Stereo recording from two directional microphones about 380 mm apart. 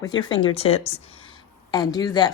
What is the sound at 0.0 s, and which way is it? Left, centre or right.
Speech, centre.